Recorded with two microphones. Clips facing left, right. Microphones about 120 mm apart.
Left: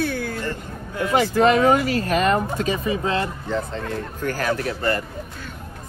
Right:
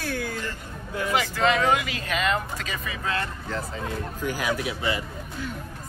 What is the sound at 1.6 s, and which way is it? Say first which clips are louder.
Speech: left 6 dB; 40° left (ahead or behind).